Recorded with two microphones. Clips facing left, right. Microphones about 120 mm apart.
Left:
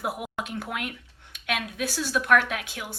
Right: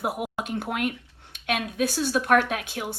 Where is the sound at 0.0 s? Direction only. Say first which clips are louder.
Right 2 dB; 20° right (ahead or behind).